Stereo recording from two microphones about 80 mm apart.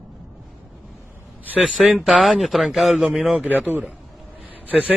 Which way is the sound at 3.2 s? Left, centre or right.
Centre.